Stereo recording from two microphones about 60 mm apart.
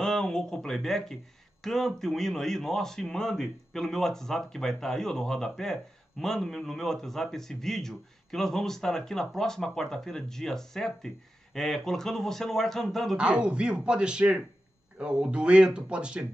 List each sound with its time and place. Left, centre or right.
0.0 s a sound: centre
1.6 s a man's voice: centre
13.2 s speech: centre